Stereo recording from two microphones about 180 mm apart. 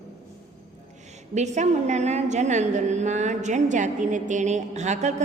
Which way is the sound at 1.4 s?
40° right (ahead or behind).